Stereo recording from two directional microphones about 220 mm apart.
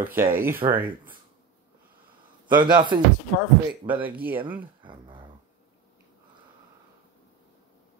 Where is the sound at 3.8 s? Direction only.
5° right (ahead or behind).